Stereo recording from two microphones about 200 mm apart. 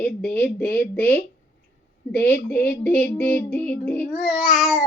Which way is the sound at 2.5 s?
10° left (ahead or behind).